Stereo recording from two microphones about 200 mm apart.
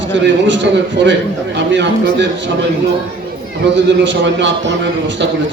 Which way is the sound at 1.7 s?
65° right (ahead or behind).